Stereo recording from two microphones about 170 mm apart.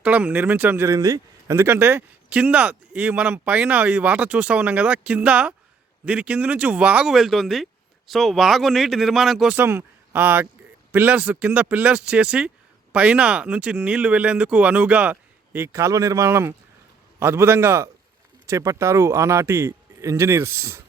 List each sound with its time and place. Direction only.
0.0 s speech: 10° right (ahead or behind)